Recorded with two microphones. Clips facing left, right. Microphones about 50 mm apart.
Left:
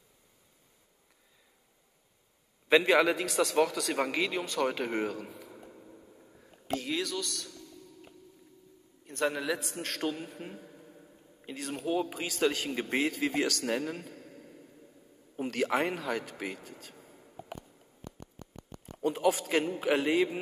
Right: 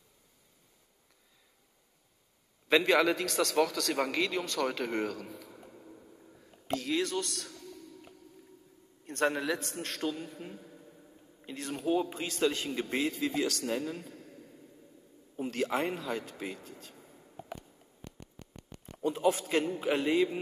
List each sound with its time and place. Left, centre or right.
2.7 s a man's voice: centre
5.3 s a sound: centre
7.3 s a sound: right
9.0 s a man's voice: centre
9.6 s a man's voice: centre
10.4 s a sound: centre
12.5 s a man's voice: centre
13.2 s speech: left
15.4 s a man's voice: left
17.1 s a sound: centre
18.9 s a man's voice: centre
19.3 s a man's voice: centre